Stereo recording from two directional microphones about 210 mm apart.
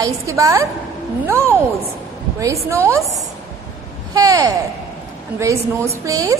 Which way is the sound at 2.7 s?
15° right (ahead or behind).